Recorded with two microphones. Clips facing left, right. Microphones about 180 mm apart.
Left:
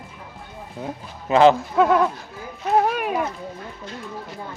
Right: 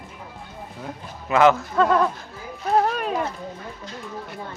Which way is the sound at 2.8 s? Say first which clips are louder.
Left 1 dB; 5° left (ahead or behind).